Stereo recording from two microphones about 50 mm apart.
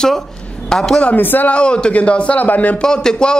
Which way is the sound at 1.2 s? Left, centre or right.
Left.